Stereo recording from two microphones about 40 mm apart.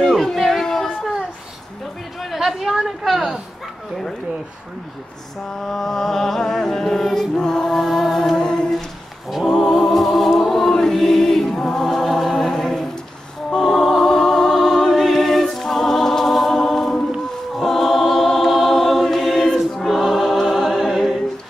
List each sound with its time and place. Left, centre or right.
0.4 s a sound: centre
0.7 s a sound: centre
2.2 s a sound: centre
3.1 s speech: centre
5.5 s music: centre
7.7 s music: centre
8.4 s humming: left
9.3 s choir: centre
9.6 s music: centre
12.4 s a sound: centre
13.5 s music: centre
14.0 s music: centre
17.6 s choir: centre
19.9 s choir: centre